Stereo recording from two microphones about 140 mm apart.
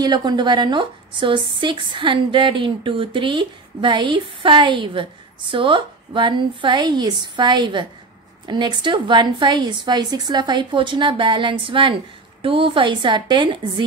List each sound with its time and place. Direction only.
0.0 s a woman's voice: 30° right (ahead or behind)